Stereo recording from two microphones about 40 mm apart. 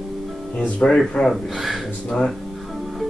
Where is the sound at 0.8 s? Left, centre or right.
Centre.